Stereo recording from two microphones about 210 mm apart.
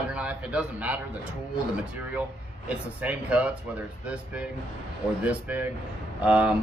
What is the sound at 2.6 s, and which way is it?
Speech, 5° right (ahead or behind).